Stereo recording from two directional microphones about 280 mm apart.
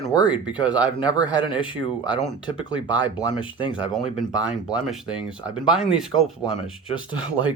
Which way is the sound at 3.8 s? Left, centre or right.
Centre.